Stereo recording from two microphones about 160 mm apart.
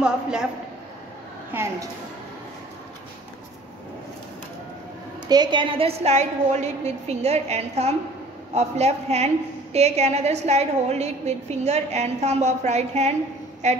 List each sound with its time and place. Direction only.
0.0 s a man's voice: 5° right (ahead or behind)
1.5 s a woman's voice: 15° right (ahead or behind)
5.3 s a woman's voice: 30° right (ahead or behind); by 13.8 s 45° right (ahead or behind)